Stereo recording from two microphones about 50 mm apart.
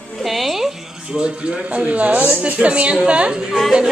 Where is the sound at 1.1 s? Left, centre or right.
Right.